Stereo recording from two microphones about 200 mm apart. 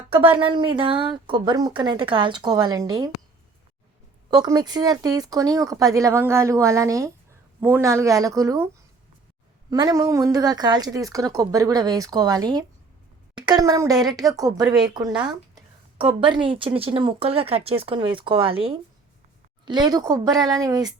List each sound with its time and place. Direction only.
0.1 s a woman's voice: 25° right (ahead or behind)
4.3 s a woman's voice: 20° right (ahead or behind)